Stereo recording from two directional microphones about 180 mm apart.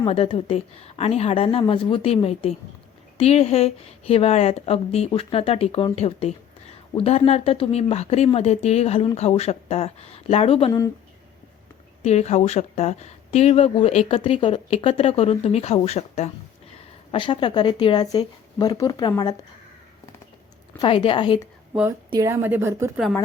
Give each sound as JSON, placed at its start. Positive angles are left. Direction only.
{"t": 0.0, "sound": "speech", "side_deg": 30}
{"t": 10.7, "sound": "speech", "side_deg": 20}
{"t": 12.0, "sound": "speech", "side_deg": 40}
{"t": 20.7, "sound": "speech", "side_deg": 30}
{"t": 21.7, "sound": "a woman's voice", "side_deg": -15}